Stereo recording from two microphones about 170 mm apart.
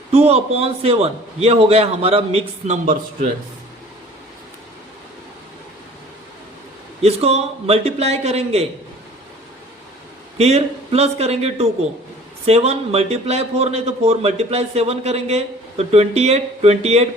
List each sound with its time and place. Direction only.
0.1 s a man's voice: 35° right (ahead or behind)
7.0 s a man's voice: 35° right (ahead or behind)
10.3 s a man's voice: 35° right (ahead or behind)